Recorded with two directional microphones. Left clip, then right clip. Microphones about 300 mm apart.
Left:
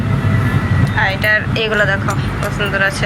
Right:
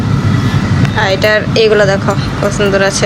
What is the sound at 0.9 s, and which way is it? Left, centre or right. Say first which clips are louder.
A woman's voice: right 4 dB; centre.